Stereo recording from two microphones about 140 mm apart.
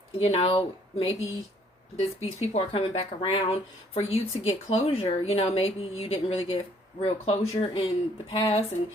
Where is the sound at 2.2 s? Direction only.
50° left (ahead or behind).